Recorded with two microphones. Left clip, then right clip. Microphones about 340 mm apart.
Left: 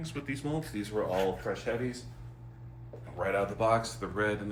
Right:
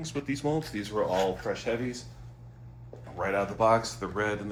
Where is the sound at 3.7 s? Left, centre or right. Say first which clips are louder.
Right 2 dB; centre.